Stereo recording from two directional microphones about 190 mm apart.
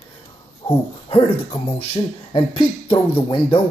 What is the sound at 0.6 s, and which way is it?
Speech, 20° left (ahead or behind).